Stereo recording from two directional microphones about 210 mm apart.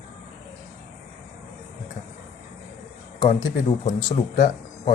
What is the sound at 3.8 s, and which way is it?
Speech, 35° left (ahead or behind).